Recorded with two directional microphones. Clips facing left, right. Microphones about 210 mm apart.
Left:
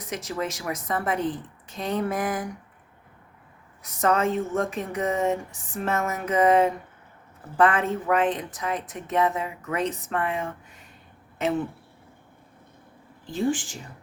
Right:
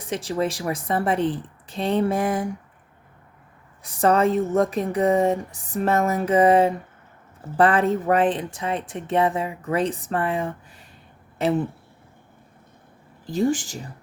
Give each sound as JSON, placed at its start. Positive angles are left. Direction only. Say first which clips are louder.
{"t": 0.0, "sound": "a woman's voice", "louder": "right 5 dB", "side_deg": -30}
{"t": 3.8, "sound": "a woman's voice", "louder": "right 4 dB", "side_deg": -35}
{"t": 13.2, "sound": "a woman's voice", "louder": "right 4 dB", "side_deg": -40}